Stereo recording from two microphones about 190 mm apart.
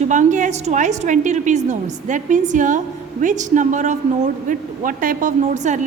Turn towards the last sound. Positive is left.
turn(degrees=-40)  # may be behind; listen again after turning